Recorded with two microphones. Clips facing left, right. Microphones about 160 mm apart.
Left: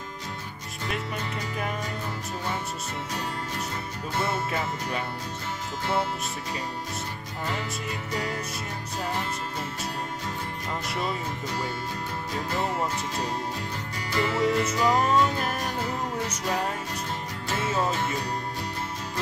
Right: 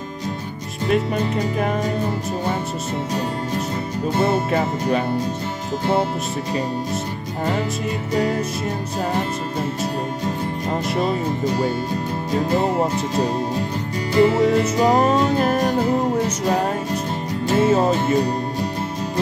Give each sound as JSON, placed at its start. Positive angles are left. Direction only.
{"t": 1.1, "sound": "music", "side_deg": -25}
{"t": 4.1, "sound": "music", "side_deg": -30}
{"t": 10.7, "sound": "music", "side_deg": -25}